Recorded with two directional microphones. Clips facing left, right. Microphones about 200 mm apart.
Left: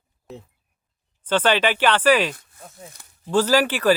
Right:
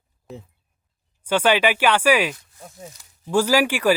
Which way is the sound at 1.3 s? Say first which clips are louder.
Right 1 dB; 10° right (ahead or behind).